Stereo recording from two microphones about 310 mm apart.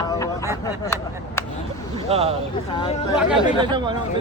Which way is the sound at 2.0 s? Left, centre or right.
Centre.